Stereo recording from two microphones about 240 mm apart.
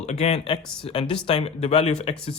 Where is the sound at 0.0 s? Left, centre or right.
Left.